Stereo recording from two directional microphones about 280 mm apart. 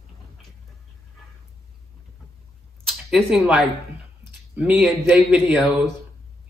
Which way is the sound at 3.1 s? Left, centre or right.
Centre.